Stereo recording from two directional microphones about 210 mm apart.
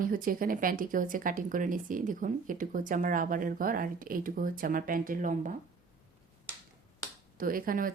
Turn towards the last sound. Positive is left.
turn(degrees=-40)  # may be behind; listen again after turning